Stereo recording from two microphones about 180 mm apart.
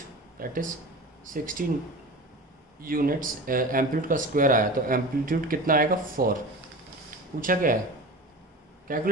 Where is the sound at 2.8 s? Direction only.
50° right (ahead or behind).